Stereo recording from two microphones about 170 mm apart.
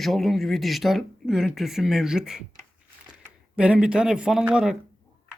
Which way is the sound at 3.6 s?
5° right (ahead or behind).